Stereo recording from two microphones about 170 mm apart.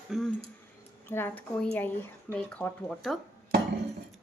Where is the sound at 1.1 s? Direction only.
10° left (ahead or behind).